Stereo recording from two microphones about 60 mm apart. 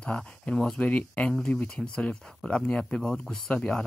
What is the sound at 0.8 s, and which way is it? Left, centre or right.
Speech, left.